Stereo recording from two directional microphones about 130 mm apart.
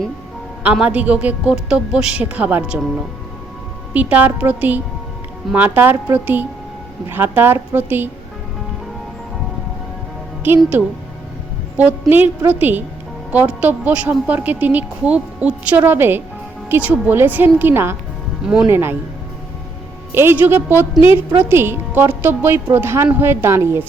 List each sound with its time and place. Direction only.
0.6 s speech: 10° right (ahead or behind)
3.9 s speech: 10° right (ahead or behind)
10.5 s speech: 15° right (ahead or behind)
11.8 s speech: 15° right (ahead or behind)
20.1 s speech: 20° right (ahead or behind)